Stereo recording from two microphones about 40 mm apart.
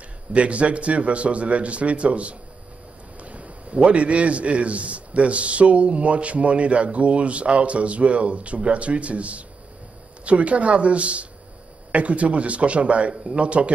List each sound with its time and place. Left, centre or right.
0.3 s a man's voice: right